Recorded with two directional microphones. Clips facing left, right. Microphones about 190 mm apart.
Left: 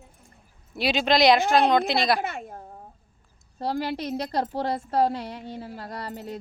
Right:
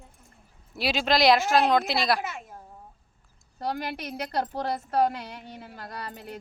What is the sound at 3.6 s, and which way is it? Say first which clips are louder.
A woman's voice: left 4 dB; 30° left (ahead or behind).